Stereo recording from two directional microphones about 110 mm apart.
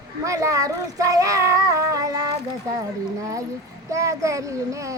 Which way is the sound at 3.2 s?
30° right (ahead or behind).